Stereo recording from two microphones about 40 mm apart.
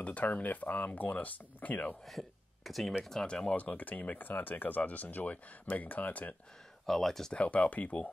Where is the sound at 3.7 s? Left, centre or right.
Left.